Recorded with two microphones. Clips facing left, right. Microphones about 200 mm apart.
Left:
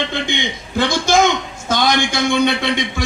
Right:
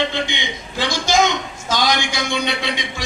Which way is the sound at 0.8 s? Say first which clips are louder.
Left 3 dB; 55° left (ahead or behind).